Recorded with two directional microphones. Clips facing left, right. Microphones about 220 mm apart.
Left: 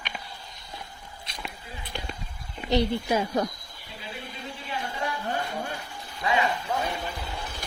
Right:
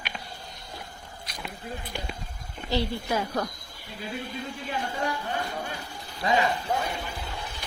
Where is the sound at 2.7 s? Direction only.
20° left (ahead or behind).